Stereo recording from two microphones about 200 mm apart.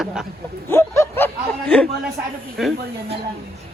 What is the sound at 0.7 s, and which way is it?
Speech, 10° left (ahead or behind).